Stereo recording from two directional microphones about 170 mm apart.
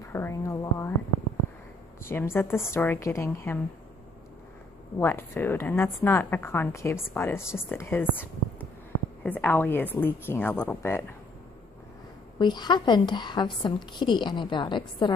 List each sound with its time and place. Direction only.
0.1 s a sound: 15° left (ahead or behind)
2.0 s a woman's voice: 15° left (ahead or behind)
4.9 s a woman's voice: 15° left (ahead or behind)
12.4 s a woman's voice: 25° left (ahead or behind)